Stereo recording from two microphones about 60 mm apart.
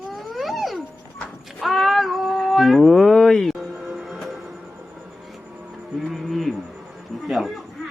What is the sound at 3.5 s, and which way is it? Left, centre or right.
Music, centre.